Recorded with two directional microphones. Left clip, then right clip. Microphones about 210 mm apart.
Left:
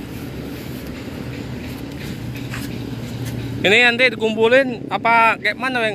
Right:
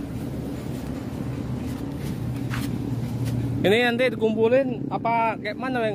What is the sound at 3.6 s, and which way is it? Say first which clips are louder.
Speech: left 7 dB; 10° right (ahead or behind).